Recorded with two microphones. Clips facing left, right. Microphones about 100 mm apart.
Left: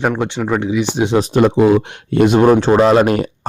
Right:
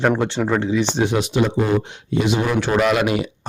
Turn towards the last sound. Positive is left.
turn(degrees=45)  # may be behind; listen again after turning